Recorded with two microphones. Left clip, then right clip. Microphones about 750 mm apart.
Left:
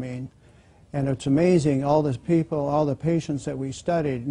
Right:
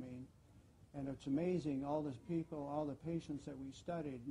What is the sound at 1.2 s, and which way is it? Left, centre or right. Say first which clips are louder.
A man's voice: left 19 dB; left.